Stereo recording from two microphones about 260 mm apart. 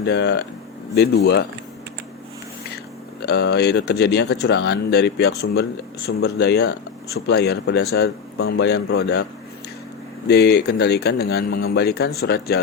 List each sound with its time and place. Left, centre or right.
0.0 s speech: left
3.2 s speech: left
10.2 s speech: left